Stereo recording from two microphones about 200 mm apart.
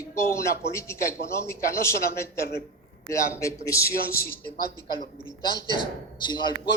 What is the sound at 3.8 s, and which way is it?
Speech, 50° left (ahead or behind).